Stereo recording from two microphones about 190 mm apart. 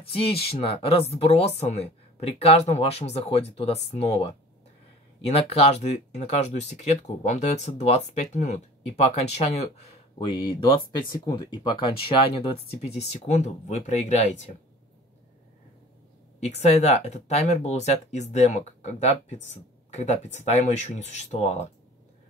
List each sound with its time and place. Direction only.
0.0 s speech: 30° left (ahead or behind)
10.1 s speech: 25° left (ahead or behind)
16.3 s speech: 35° left (ahead or behind)